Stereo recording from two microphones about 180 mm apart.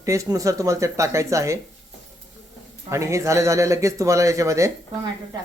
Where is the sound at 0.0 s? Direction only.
15° right (ahead or behind).